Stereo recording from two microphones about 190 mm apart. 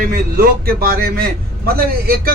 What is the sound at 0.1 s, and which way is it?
A man's voice, 50° right (ahead or behind).